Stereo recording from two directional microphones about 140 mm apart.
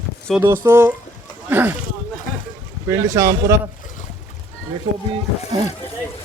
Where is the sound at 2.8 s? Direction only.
20° right (ahead or behind).